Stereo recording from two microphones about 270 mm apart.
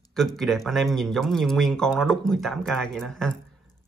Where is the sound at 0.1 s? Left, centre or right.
Centre.